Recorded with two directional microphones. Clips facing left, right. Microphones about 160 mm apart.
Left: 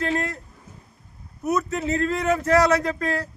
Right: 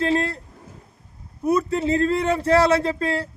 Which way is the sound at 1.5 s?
30° right (ahead or behind).